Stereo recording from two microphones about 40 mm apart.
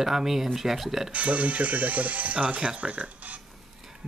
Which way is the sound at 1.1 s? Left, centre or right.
Right.